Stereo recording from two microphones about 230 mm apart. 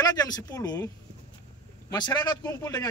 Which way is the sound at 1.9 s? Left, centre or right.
Centre.